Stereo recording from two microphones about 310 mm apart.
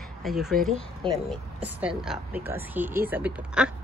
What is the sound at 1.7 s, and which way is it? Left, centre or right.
Speech, centre.